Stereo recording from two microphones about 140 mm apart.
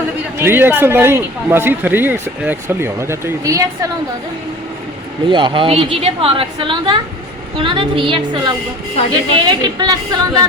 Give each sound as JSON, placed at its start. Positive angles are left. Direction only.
{"t": 0.4, "sound": "speech", "side_deg": -15}
{"t": 5.3, "sound": "a woman's voice", "side_deg": -35}